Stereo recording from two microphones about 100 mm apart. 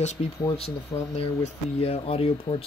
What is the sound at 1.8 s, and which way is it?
Speech, 70° left (ahead or behind).